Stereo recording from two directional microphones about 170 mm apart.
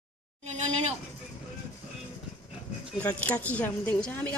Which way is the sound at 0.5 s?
40° right (ahead or behind).